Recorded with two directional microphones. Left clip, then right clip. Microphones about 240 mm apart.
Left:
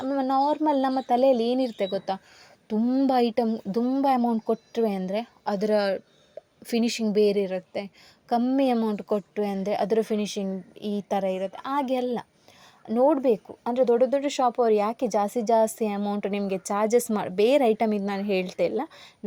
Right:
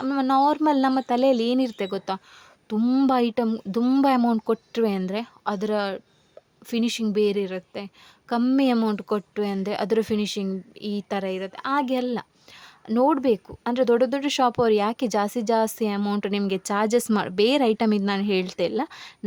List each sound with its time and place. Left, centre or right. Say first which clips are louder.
0.0 s a woman's voice: right 3 dB; right